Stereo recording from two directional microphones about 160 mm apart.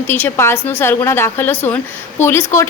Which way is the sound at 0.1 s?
15° left (ahead or behind).